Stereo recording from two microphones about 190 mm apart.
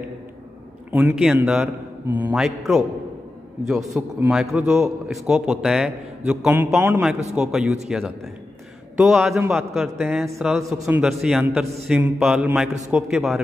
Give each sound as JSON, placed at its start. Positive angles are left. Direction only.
{"t": 0.9, "sound": "a man's voice", "side_deg": -5}
{"t": 8.9, "sound": "a man's voice", "side_deg": -5}